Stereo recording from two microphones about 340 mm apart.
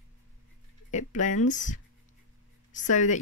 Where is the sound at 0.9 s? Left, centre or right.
Left.